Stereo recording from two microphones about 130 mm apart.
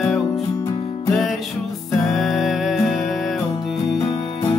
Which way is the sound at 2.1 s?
Centre (ahead or behind).